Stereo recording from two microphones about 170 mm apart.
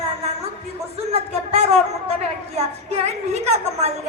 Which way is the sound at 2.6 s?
40° right (ahead or behind).